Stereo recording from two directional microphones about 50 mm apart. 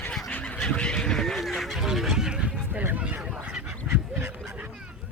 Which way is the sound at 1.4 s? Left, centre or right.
Centre.